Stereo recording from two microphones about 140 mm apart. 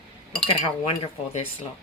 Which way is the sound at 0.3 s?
45° left (ahead or behind).